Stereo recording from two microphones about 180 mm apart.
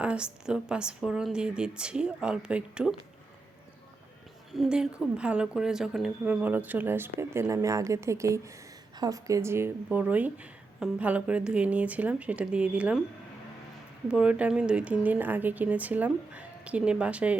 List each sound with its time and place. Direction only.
0.0 s speech: 5° right (ahead or behind)
4.5 s speech: 5° right (ahead or behind)
14.1 s speech: 5° right (ahead or behind)